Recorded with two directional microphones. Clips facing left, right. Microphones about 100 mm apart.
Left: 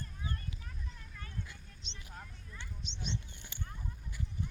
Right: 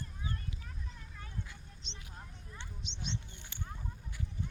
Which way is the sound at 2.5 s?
20° right (ahead or behind).